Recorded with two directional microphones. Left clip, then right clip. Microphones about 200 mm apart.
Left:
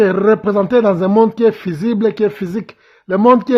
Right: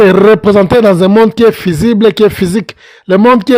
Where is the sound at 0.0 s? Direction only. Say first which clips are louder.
Right 7 dB; 35° right (ahead or behind).